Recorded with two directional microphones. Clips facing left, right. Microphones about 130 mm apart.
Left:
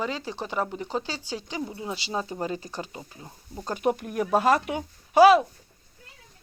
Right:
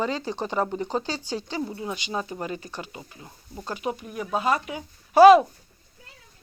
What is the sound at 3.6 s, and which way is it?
Speech, 45° left (ahead or behind).